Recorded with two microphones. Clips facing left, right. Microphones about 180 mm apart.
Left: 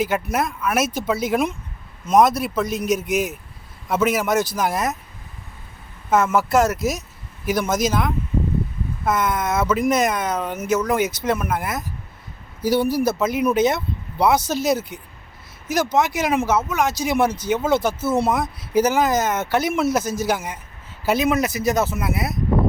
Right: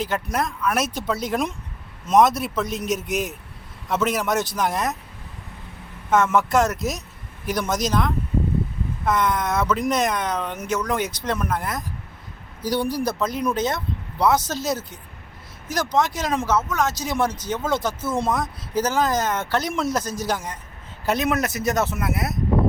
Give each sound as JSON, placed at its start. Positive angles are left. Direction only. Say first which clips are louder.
{"t": 0.0, "sound": "speech", "louder": "left 3 dB", "side_deg": 5}
{"t": 6.1, "sound": "speech", "louder": "left 1 dB", "side_deg": 5}